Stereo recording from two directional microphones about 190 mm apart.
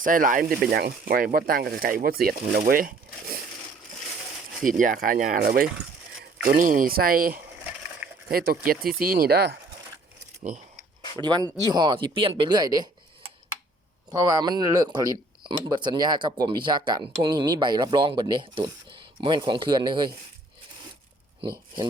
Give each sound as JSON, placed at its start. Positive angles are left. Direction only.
{"t": 0.0, "sound": "speech", "side_deg": -45}
{"t": 4.6, "sound": "speech", "side_deg": -45}
{"t": 11.2, "sound": "speech", "side_deg": -20}
{"t": 14.1, "sound": "speech", "side_deg": -20}